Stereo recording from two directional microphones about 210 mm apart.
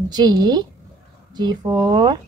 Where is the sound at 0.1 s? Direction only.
20° right (ahead or behind).